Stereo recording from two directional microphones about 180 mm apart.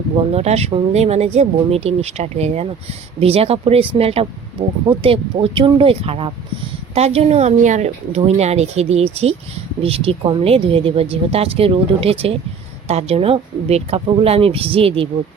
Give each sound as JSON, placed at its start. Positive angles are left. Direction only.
{"t": 0.2, "sound": "speech", "side_deg": -35}